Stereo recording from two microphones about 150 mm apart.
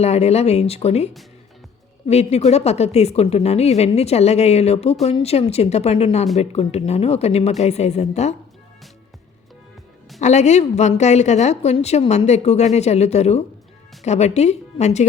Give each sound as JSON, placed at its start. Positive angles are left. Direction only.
{"t": 0.0, "sound": "a woman's voice", "side_deg": 45}
{"t": 10.2, "sound": "a woman's voice", "side_deg": 50}